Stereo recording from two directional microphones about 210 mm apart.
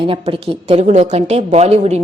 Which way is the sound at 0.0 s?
25° right (ahead or behind).